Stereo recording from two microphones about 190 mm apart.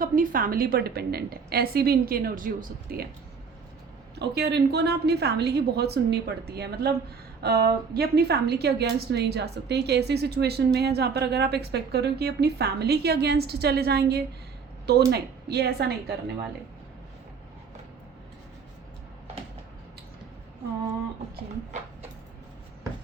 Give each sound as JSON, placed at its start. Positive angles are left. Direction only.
{"t": 0.0, "sound": "a woman's voice", "side_deg": -45}
{"t": 4.1, "sound": "a woman's voice", "side_deg": -60}